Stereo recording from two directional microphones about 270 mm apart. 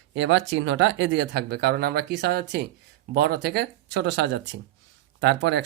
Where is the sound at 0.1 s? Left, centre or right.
Right.